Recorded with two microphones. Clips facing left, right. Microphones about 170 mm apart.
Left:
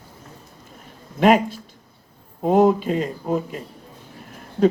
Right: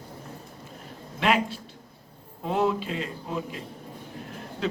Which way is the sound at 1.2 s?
45° left (ahead or behind).